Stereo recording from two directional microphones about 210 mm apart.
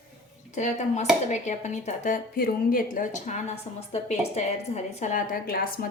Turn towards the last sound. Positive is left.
turn(degrees=45)  # may be behind; listen again after turning